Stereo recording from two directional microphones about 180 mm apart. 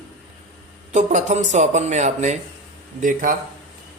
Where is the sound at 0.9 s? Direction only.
40° right (ahead or behind).